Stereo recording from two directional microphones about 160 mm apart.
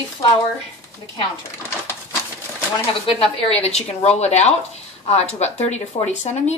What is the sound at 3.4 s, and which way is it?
A woman's voice, 40° left (ahead or behind).